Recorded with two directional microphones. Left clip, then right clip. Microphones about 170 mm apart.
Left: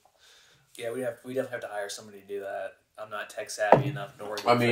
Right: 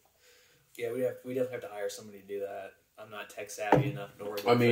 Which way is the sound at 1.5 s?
5° right (ahead or behind).